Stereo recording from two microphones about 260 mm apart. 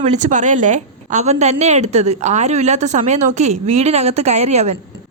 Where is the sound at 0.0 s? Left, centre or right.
Right.